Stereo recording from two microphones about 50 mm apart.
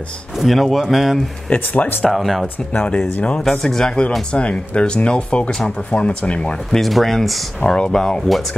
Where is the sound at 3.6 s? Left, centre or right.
Centre.